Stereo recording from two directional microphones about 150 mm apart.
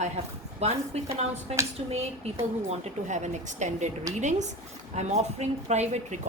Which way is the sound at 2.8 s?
50° right (ahead or behind).